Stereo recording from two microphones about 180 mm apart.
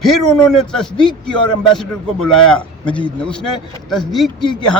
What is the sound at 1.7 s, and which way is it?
Speech, 5° left (ahead or behind).